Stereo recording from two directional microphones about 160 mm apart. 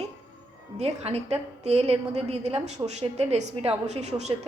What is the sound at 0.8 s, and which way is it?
A woman's voice, 40° right (ahead or behind).